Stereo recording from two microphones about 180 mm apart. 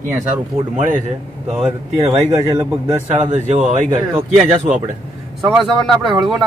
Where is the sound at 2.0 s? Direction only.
35° right (ahead or behind).